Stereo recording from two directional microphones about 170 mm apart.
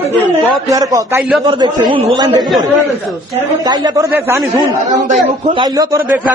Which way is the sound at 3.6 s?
25° right (ahead or behind).